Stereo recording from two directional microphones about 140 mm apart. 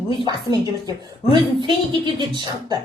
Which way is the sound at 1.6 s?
35° right (ahead or behind).